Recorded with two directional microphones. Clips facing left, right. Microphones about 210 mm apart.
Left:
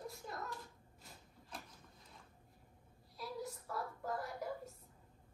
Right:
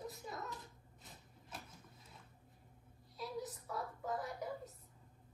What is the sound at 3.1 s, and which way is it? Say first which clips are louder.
Child singing: right 1 dB; centre (ahead or behind).